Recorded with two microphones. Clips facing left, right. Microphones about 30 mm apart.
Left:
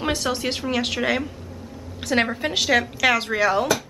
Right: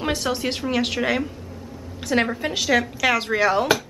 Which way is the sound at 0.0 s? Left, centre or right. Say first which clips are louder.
Even; centre.